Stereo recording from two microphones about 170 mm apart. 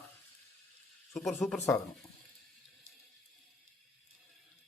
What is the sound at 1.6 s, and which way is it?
Speech, 15° left (ahead or behind).